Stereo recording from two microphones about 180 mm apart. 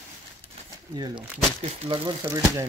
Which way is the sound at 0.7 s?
25° right (ahead or behind).